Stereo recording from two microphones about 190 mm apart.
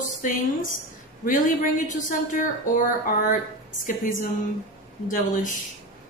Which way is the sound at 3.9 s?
45° left (ahead or behind).